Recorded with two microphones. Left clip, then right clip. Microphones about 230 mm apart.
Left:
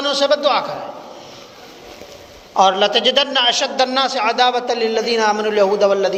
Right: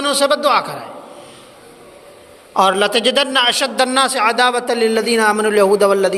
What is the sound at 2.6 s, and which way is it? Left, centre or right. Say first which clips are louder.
A man's voice: even; right.